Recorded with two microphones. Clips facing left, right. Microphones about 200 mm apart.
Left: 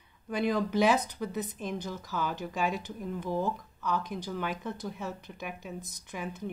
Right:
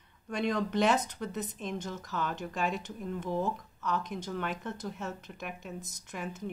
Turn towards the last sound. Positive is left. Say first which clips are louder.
# left 1 dB
turn(degrees=0)  # may be behind; listen again after turning